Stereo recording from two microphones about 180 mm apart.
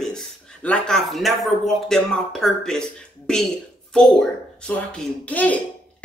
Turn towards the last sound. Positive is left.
turn(degrees=10)  # may be behind; listen again after turning